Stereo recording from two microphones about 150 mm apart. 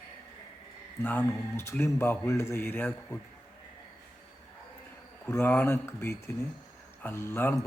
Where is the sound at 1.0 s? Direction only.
15° left (ahead or behind).